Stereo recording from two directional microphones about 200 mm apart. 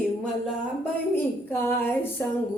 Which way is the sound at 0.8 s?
10° left (ahead or behind).